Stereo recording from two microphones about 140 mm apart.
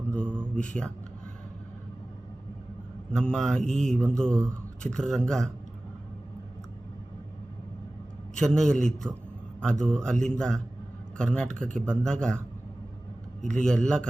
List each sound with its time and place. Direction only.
0.1 s speech: 5° left (ahead or behind)
3.1 s mantra: 5° left (ahead or behind)
8.4 s mantra: 5° left (ahead or behind)
13.5 s mantra: 5° left (ahead or behind)